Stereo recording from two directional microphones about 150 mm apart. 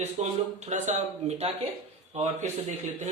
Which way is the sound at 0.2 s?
45° right (ahead or behind).